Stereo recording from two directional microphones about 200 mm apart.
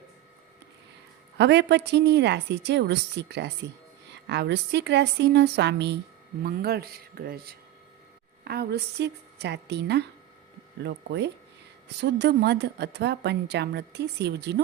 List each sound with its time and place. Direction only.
1.4 s a woman's voice: 60° right (ahead or behind)